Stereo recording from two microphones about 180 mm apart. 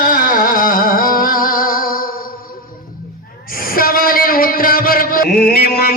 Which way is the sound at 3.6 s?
55° left (ahead or behind).